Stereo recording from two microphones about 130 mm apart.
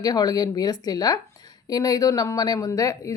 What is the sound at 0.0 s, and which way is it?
Speech, 30° left (ahead or behind).